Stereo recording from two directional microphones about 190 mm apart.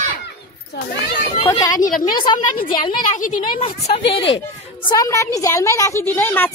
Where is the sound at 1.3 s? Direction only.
25° left (ahead or behind).